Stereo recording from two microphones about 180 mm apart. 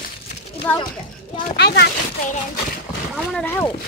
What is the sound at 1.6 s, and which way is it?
Speech, 70° left (ahead or behind).